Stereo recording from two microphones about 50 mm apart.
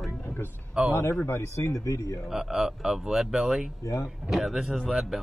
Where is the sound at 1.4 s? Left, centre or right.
Left.